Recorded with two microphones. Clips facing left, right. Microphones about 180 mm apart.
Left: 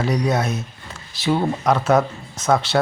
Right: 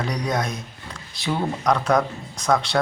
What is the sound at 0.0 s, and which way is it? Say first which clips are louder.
Speech: left 5 dB; 5° left (ahead or behind).